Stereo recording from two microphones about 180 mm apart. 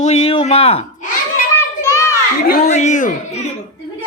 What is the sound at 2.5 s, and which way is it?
Speech, 45° left (ahead or behind).